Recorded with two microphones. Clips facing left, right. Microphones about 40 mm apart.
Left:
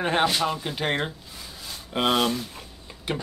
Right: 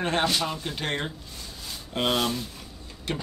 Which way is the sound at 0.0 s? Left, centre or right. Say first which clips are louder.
Left 3 dB; centre.